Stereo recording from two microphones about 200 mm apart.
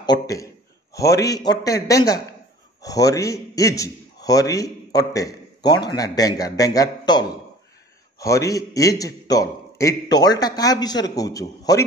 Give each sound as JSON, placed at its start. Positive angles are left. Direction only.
{"t": 0.0, "sound": "a man's voice", "side_deg": 20}